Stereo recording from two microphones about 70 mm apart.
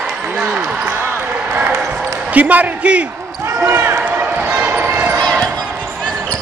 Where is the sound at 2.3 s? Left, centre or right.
Right.